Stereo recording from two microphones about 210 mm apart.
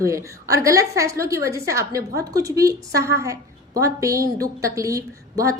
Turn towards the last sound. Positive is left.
turn(degrees=-15)  # may be behind; listen again after turning